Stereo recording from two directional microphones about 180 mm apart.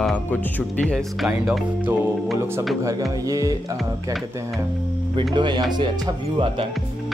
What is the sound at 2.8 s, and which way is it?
Speech, 20° right (ahead or behind).